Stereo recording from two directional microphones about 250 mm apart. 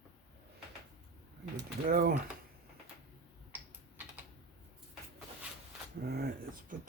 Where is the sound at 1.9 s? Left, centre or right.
Right.